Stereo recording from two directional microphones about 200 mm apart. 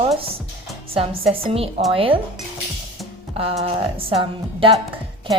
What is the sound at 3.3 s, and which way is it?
Speech, 30° right (ahead or behind).